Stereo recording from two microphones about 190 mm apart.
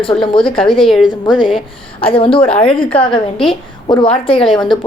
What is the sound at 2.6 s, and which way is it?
Speech, 5° left (ahead or behind).